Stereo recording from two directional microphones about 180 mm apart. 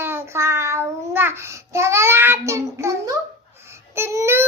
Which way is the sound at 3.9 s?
15° right (ahead or behind).